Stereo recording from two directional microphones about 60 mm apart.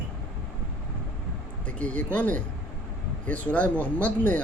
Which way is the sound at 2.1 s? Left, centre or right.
Left.